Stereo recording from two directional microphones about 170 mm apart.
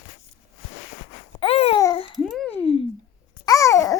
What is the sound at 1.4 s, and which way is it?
Babbling, 35° left (ahead or behind).